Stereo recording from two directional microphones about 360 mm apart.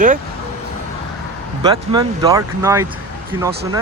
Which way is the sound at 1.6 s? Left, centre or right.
Centre.